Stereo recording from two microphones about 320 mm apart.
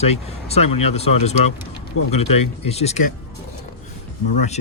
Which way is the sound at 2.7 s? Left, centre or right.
Centre.